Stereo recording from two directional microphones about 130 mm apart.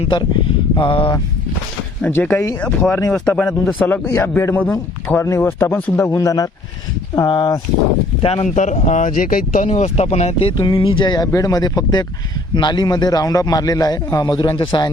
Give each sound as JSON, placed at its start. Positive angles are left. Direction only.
{"t": 0.0, "sound": "a man's voice", "side_deg": 35}
{"t": 2.0, "sound": "a man's voice", "side_deg": 10}
{"t": 8.2, "sound": "speech", "side_deg": 50}
{"t": 8.5, "sound": "speech", "side_deg": 65}
{"t": 10.6, "sound": "a man's voice", "side_deg": 40}